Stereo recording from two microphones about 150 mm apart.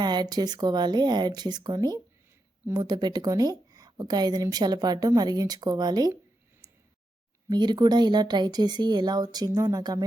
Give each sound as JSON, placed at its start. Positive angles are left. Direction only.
{"t": 0.0, "sound": "speech", "side_deg": -30}
{"t": 7.5, "sound": "speech", "side_deg": -30}